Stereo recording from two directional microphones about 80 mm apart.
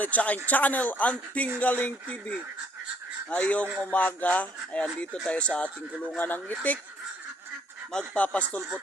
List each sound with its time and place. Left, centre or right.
0.0 s speech: centre
7.9 s speech: centre